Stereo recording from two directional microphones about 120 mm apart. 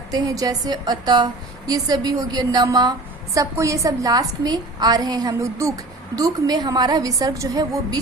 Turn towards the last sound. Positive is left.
turn(degrees=-30)  # may be behind; listen again after turning